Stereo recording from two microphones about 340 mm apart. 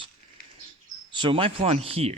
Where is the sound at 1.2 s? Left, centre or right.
Centre.